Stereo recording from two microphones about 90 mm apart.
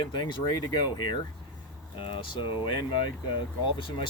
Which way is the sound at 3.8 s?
65° left (ahead or behind).